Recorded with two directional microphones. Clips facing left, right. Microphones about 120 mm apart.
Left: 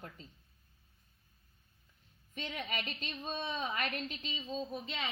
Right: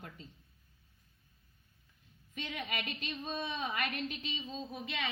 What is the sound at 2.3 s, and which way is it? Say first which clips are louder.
A woman's voice: even; 30° left (ahead or behind).